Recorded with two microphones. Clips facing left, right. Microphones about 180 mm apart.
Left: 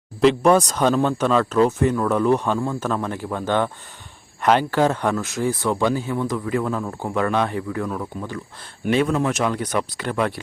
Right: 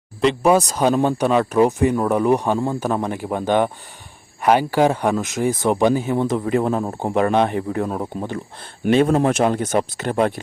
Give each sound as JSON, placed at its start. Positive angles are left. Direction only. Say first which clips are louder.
{"t": 0.2, "sound": "speech", "louder": "left 1 dB", "side_deg": -5}
{"t": 9.0, "sound": "speech", "louder": "right 4 dB", "side_deg": -45}
{"t": 9.5, "sound": "speech", "louder": "right 4 dB", "side_deg": -30}